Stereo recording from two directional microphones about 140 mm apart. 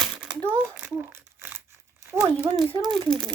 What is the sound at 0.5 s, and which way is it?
Crumpling, 10° right (ahead or behind).